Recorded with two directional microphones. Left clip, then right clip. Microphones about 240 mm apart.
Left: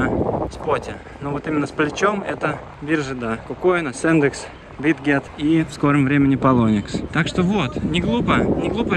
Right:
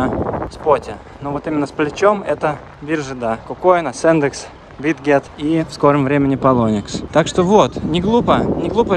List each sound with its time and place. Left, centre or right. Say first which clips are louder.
0.2 s vehicle: even; left
0.7 s speech: right 10 dB; centre